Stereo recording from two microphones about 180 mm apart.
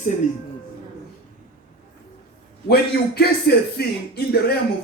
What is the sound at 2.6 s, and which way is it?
A man's voice, 60° left (ahead or behind).